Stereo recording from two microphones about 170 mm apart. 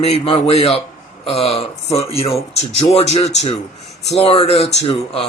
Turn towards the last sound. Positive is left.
turn(degrees=35)  # may be behind; listen again after turning